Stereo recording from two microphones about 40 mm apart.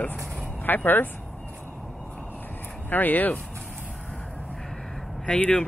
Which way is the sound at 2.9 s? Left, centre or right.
Left.